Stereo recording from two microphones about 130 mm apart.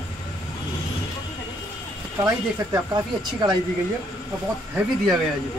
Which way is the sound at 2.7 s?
30° right (ahead or behind).